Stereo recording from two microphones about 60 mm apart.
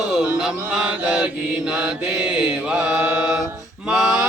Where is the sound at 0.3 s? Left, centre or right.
Centre.